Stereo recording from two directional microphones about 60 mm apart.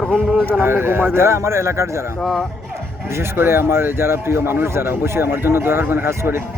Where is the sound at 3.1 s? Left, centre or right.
Right.